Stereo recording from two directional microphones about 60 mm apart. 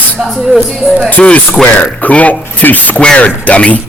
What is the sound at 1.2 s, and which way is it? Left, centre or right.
Speech, left.